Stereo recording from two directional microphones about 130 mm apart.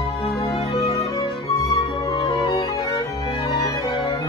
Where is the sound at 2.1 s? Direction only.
40° left (ahead or behind).